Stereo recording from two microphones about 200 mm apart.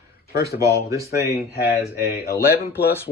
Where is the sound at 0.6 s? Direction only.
15° right (ahead or behind).